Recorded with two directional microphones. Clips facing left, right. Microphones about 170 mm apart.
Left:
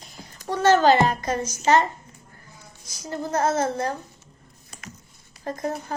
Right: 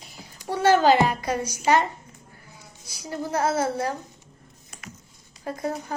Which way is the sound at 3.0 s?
10° right (ahead or behind).